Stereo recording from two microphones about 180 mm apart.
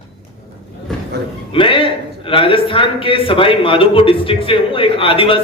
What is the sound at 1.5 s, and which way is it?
A man's voice, 30° left (ahead or behind).